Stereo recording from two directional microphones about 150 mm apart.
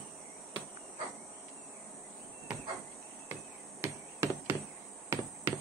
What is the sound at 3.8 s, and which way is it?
Insect, 20° right (ahead or behind).